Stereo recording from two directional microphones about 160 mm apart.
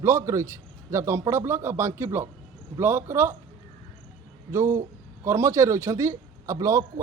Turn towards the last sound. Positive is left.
turn(degrees=-20)  # may be behind; listen again after turning